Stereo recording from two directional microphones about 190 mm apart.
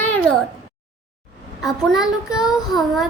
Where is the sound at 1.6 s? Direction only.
Centre (ahead or behind).